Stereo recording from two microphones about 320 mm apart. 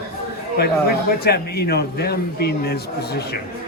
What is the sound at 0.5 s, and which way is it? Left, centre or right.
A man's voice, left.